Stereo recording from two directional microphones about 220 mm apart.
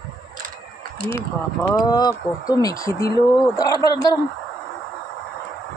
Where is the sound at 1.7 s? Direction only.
15° left (ahead or behind).